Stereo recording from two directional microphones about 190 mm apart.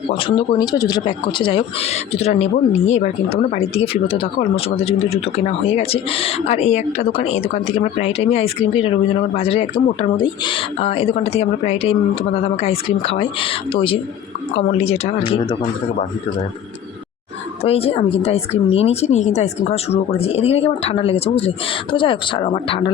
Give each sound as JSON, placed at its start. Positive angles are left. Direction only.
{"t": 0.1, "sound": "speech", "side_deg": 25}
{"t": 17.6, "sound": "speech", "side_deg": 30}